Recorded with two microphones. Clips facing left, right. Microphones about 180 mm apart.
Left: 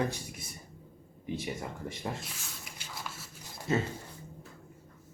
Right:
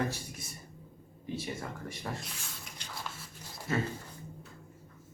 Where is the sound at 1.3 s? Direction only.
20° left (ahead or behind).